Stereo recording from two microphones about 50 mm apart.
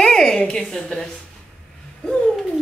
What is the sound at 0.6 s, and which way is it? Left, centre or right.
Speech, centre.